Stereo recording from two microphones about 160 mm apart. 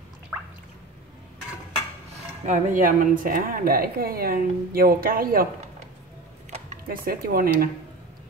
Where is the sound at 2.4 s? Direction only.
50° right (ahead or behind); by 5.5 s 65° right (ahead or behind).